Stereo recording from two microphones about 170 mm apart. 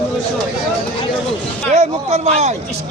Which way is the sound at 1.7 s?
40° right (ahead or behind).